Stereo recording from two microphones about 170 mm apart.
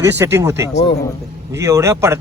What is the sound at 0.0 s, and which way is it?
Speech, 15° right (ahead or behind).